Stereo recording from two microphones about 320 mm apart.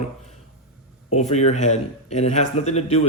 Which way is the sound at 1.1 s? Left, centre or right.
Left.